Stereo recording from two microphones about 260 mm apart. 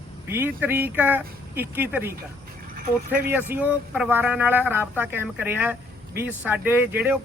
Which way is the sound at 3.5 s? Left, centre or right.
Centre.